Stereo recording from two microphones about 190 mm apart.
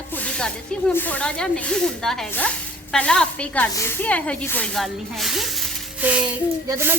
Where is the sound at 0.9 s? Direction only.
10° left (ahead or behind).